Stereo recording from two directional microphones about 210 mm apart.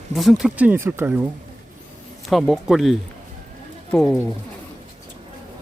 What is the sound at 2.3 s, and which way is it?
Speech, centre (ahead or behind).